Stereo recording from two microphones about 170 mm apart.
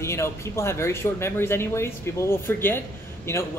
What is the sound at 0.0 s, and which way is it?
Speech, 15° left (ahead or behind).